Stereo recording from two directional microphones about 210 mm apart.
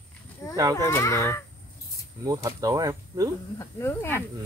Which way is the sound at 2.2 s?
15° right (ahead or behind).